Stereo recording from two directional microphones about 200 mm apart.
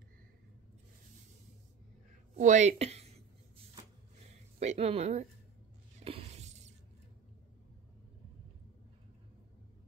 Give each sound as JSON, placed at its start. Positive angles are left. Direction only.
{"t": 2.3, "sound": "a woman's voice", "side_deg": -35}
{"t": 4.6, "sound": "a woman's voice", "side_deg": -30}
{"t": 5.9, "sound": "a sound", "side_deg": -30}